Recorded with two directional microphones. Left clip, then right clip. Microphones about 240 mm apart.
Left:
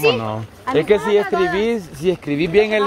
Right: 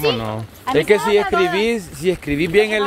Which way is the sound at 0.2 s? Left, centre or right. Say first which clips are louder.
Left 1 dB; centre.